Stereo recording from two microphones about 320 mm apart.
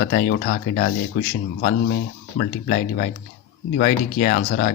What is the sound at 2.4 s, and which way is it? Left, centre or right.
Speech, left.